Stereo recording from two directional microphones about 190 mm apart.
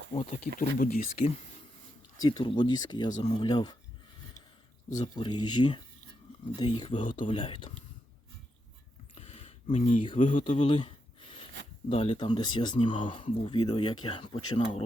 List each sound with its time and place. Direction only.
0.1 s speech: 40° left (ahead or behind)
2.2 s speech: 25° left (ahead or behind)
3.2 s speech: 35° left (ahead or behind)
3.4 s speech: 20° left (ahead or behind)
4.9 s speech: 20° left (ahead or behind)
9.1 s a sound: 30° left (ahead or behind)
10.7 s a sound: 25° left (ahead or behind)
11.9 s speech: 25° left (ahead or behind)